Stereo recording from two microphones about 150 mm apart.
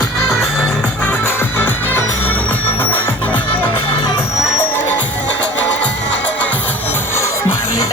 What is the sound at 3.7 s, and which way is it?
Music, 35° left (ahead or behind).